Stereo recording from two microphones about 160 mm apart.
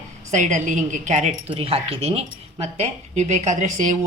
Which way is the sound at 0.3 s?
50° right (ahead or behind).